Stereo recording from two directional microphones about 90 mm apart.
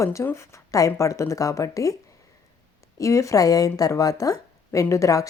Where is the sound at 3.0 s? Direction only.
35° left (ahead or behind).